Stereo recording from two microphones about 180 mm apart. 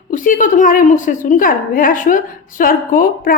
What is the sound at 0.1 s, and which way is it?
A woman's voice, 50° left (ahead or behind).